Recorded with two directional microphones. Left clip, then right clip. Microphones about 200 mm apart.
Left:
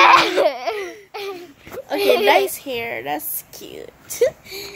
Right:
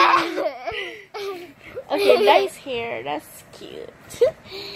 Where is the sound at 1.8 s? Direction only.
Centre (ahead or behind).